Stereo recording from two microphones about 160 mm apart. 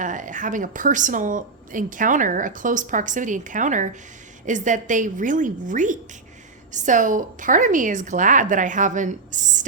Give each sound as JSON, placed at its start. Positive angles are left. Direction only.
{"t": 0.0, "sound": "a woman's voice", "side_deg": -55}